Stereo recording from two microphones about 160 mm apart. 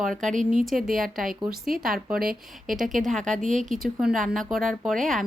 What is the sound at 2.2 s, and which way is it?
Speech, 65° right (ahead or behind).